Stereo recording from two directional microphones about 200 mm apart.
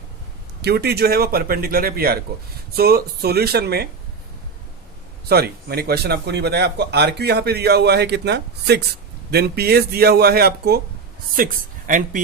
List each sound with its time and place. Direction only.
0.6 s speech: 55° right (ahead or behind)
5.3 s speech: 50° right (ahead or behind)